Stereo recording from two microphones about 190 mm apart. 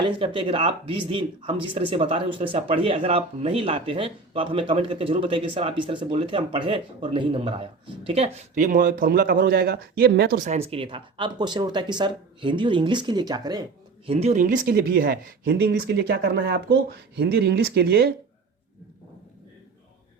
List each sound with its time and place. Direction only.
0.3 s speech: 25° right (ahead or behind)
14.1 s speech: 35° right (ahead or behind); by 18.1 s 55° right (ahead or behind)